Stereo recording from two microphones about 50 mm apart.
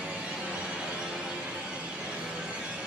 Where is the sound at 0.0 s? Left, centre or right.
Right.